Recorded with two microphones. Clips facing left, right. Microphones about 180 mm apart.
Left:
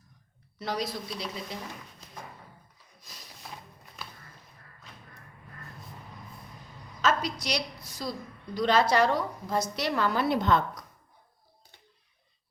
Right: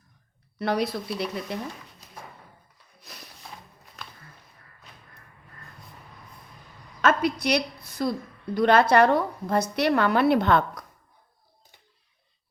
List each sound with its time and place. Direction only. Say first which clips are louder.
0.6 s a woman's voice: right 7 dB; 60° right (ahead or behind)
3.0 s a sound: right 5 dB; 65° right (ahead or behind)
7.0 s a woman's voice: right 5 dB; 60° right (ahead or behind)